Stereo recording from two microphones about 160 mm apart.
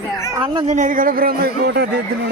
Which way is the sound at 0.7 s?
50° right (ahead or behind).